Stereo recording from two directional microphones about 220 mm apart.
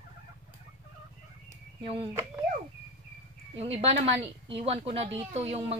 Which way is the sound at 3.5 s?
25° right (ahead or behind).